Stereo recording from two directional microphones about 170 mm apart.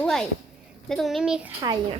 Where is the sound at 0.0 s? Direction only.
5° left (ahead or behind).